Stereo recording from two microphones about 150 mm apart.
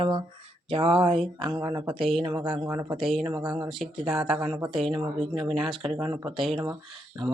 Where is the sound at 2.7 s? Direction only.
20° right (ahead or behind).